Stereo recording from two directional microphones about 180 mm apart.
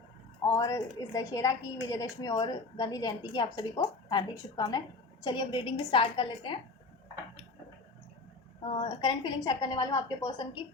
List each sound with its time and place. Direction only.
0.4 s a woman's voice: 15° left (ahead or behind)
8.6 s a woman's voice: 30° left (ahead or behind)